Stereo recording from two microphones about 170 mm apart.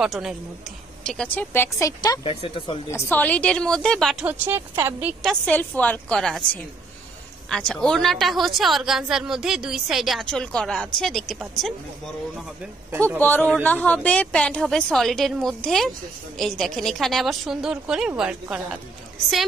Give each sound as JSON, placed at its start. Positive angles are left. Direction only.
{"t": 0.0, "sound": "a woman's voice", "side_deg": -5}
{"t": 2.9, "sound": "a woman's voice", "side_deg": 15}
{"t": 4.3, "sound": "a woman's voice", "side_deg": -15}
{"t": 5.2, "sound": "a woman's voice", "side_deg": 5}
{"t": 13.2, "sound": "a woman's voice", "side_deg": 10}